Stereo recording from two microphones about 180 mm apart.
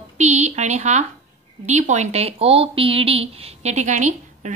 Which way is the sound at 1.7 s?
40° right (ahead or behind).